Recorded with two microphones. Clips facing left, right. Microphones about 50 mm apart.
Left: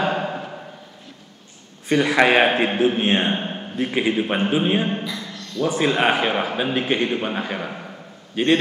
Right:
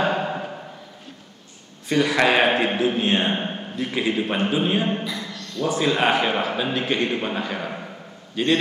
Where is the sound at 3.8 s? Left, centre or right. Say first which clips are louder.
Left 3 dB; left.